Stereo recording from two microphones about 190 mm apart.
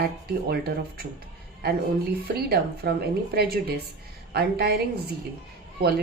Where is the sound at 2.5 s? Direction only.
55° right (ahead or behind).